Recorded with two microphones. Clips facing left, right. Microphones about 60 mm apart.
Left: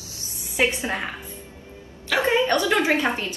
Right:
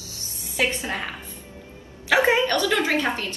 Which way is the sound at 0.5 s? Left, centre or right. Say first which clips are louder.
Left 2 dB; left.